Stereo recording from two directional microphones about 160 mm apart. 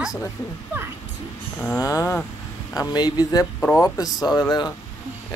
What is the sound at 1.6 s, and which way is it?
Speech, 15° left (ahead or behind).